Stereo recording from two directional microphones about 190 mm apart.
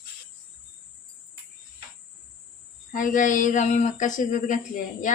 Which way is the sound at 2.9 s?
45° left (ahead or behind).